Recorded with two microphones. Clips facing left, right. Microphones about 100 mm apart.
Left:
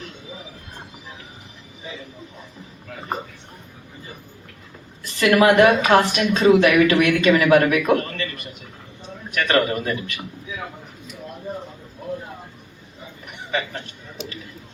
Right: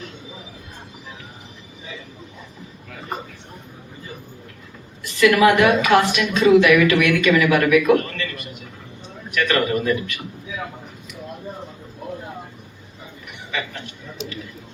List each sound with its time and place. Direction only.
5.2 s a woman's voice: 40° left (ahead or behind)
13.5 s a woman's voice: 35° left (ahead or behind)